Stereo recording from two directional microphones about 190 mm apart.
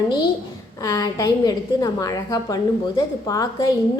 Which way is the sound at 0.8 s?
20° left (ahead or behind).